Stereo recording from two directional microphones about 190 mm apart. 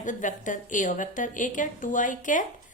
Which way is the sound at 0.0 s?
40° left (ahead or behind).